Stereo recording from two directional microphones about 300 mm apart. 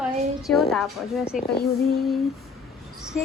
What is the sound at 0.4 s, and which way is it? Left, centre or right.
Speech, centre.